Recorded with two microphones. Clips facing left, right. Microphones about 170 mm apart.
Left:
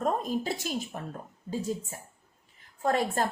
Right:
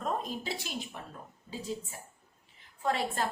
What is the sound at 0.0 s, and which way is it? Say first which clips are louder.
A woman's voice: left 6 dB; 45° left (ahead or behind).